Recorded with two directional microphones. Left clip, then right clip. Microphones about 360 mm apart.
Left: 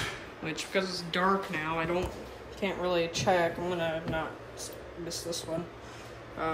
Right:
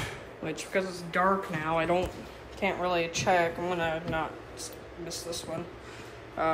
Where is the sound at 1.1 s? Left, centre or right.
Centre.